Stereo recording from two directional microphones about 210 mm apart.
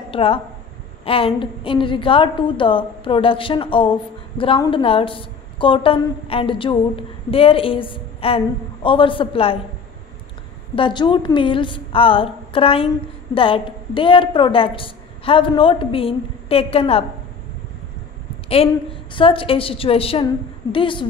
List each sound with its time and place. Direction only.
0.1 s a woman's voice: 25° left (ahead or behind)
10.8 s a woman's voice: 20° left (ahead or behind)
19.1 s a woman's voice: 25° left (ahead or behind)